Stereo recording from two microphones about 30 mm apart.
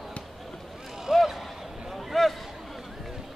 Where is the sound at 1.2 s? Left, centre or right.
Centre.